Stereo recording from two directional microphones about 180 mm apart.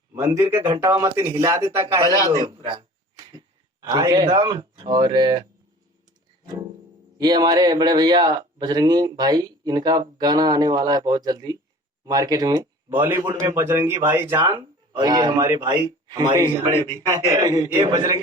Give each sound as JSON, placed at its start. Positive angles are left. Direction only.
{"t": 0.2, "sound": "speech", "side_deg": -15}
{"t": 2.3, "sound": "speech", "side_deg": -30}
{"t": 3.8, "sound": "speech", "side_deg": -20}
{"t": 7.2, "sound": "speech", "side_deg": -25}